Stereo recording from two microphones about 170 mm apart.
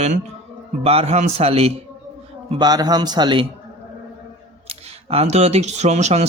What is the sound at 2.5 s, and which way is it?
Speech, 25° right (ahead or behind).